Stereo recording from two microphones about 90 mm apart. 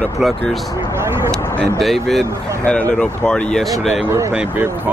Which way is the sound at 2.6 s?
15° left (ahead or behind).